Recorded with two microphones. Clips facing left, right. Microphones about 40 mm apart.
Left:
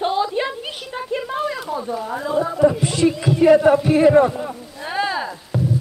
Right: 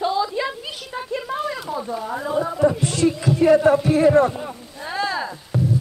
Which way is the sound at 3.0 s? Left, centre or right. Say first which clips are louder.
Left 2 dB; left.